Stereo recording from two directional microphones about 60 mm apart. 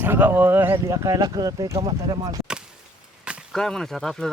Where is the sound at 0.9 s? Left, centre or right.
Right.